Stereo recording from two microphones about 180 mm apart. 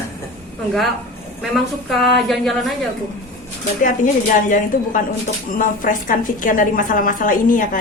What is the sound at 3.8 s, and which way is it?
A woman's voice, 45° left (ahead or behind).